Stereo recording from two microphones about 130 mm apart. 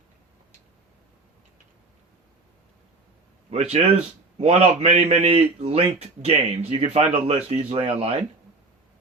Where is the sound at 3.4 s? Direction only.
55° right (ahead or behind).